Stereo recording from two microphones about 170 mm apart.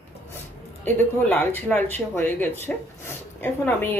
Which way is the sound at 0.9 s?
10° left (ahead or behind).